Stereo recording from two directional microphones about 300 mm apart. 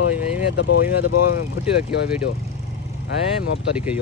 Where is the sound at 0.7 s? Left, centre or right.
Left.